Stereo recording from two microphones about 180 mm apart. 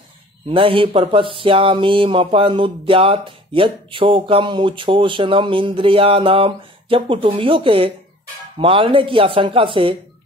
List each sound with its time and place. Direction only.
0.5 s speech: 30° right (ahead or behind)